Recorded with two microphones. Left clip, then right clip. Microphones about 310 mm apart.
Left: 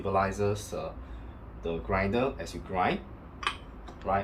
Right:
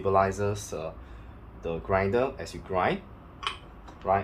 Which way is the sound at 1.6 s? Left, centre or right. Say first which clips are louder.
Right 3 dB; centre.